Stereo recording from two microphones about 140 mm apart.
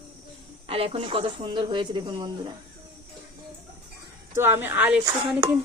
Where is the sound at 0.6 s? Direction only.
45° right (ahead or behind).